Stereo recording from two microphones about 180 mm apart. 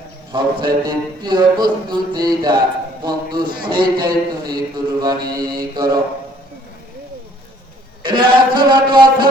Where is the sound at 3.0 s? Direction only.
25° right (ahead or behind).